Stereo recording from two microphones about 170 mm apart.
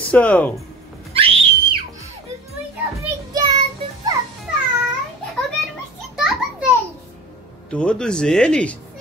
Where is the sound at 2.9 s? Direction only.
20° right (ahead or behind).